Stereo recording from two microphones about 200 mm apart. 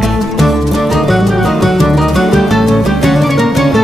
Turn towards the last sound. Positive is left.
turn(degrees=0)  # may be behind; listen again after turning